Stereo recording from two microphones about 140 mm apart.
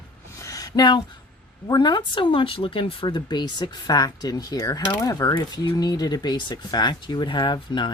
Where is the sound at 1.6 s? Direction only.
30° left (ahead or behind).